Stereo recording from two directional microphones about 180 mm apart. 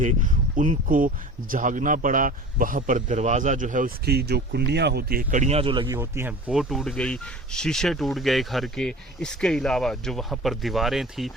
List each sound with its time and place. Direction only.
0.0 s speech: 45° right (ahead or behind); by 6.0 s 25° right (ahead or behind)
6.0 s speech: 10° right (ahead or behind)